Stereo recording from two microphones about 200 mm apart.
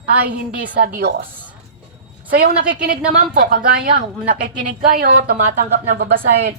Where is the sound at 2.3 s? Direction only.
50° right (ahead or behind).